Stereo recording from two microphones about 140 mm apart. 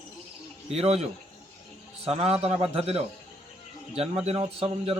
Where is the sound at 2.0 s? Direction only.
45° right (ahead or behind).